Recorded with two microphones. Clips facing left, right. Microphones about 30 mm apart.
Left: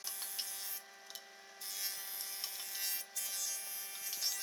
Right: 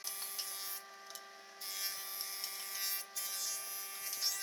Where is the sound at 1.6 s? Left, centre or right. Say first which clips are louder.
Right 1 dB; centre.